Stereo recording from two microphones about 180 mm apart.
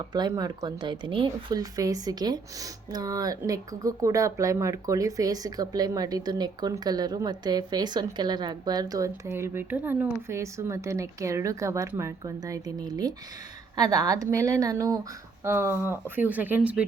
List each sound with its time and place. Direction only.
0.0 s speech: 25° right (ahead or behind); by 16.8 s 10° right (ahead or behind)